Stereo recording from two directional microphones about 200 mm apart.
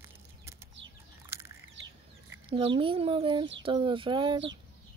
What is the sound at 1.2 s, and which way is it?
Bird, 10° right (ahead or behind).